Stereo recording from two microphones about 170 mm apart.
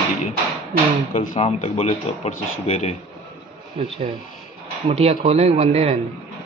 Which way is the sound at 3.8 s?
35° right (ahead or behind).